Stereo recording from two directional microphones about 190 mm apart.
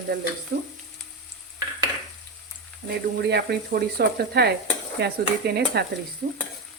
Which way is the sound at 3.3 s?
60° right (ahead or behind).